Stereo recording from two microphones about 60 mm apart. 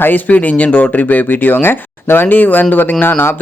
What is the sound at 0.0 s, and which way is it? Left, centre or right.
Speech, left.